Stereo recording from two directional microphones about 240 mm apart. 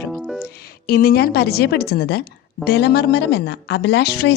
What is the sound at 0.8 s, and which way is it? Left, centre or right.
A woman's voice, left.